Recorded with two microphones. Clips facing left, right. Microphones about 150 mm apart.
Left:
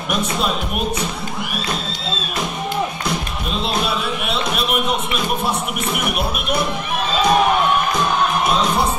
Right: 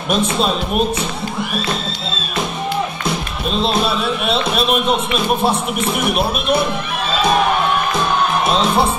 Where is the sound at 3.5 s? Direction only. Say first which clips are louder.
Right 5 dB; 25° right (ahead or behind).